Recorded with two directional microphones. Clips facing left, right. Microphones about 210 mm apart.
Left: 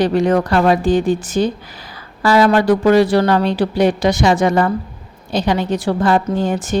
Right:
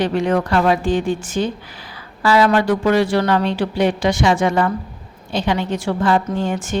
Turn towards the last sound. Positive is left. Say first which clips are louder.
# left 3 dB
turn(degrees=40)  # may be behind; listen again after turning